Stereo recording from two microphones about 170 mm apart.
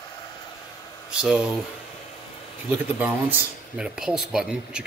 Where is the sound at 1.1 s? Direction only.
5° right (ahead or behind).